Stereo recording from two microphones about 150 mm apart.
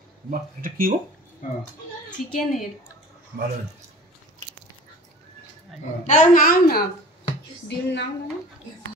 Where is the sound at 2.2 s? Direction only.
Centre (ahead or behind).